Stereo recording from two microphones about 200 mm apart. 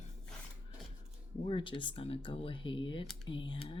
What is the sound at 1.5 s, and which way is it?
Speech, 25° left (ahead or behind).